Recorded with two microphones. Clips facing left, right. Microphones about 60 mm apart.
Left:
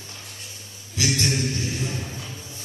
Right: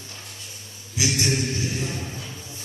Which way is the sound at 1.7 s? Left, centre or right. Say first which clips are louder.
Even; right.